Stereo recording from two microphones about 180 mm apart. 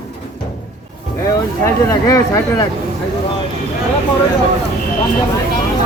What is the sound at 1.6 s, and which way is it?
Speech, 15° left (ahead or behind).